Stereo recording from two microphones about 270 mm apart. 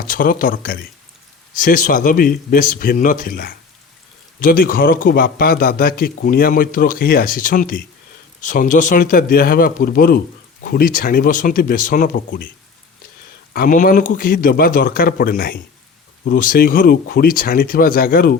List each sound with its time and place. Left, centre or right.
0.1 s a man's voice: left
13.5 s a man's voice: left